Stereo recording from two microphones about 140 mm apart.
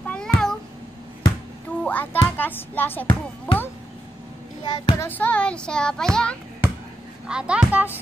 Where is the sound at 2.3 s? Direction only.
15° left (ahead or behind).